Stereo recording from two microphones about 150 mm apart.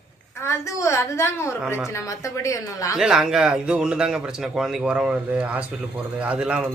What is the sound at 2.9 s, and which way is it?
A man's voice, 5° right (ahead or behind).